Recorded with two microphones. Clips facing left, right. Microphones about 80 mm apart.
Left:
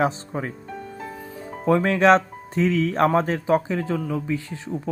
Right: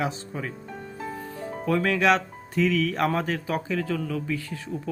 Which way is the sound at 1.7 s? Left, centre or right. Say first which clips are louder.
Left 5 dB; left.